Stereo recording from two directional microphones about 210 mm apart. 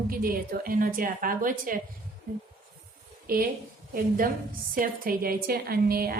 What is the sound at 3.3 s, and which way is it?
A woman's voice, 45° right (ahead or behind).